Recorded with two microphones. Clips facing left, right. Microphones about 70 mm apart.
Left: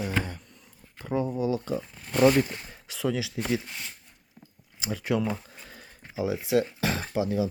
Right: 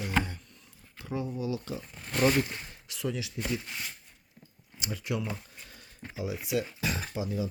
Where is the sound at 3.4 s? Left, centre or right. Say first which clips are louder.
Left 4 dB; left.